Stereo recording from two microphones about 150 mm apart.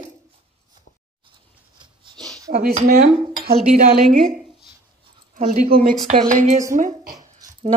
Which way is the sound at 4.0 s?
Centre (ahead or behind).